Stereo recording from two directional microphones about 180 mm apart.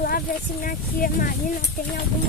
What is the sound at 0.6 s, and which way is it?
Speech, 50° left (ahead or behind).